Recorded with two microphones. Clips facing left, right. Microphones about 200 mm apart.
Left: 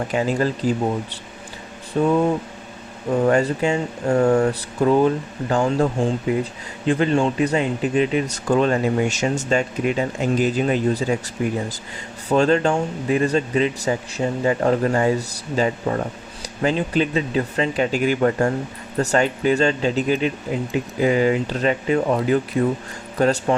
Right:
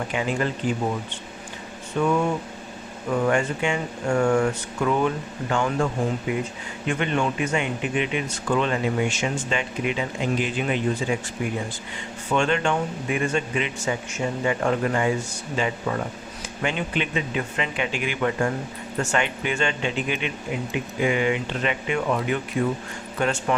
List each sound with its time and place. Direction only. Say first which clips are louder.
0.1 s speech: left 6 dB; 40° left (ahead or behind)